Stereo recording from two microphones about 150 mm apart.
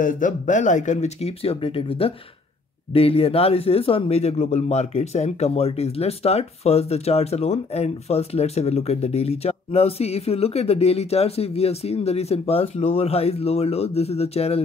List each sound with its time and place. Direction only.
0.0 s speech: 60° left (ahead or behind); by 14.6 s 45° left (ahead or behind)